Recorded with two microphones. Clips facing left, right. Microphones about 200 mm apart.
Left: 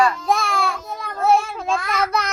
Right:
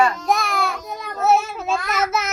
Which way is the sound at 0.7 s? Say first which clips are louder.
Even; 20° right (ahead or behind).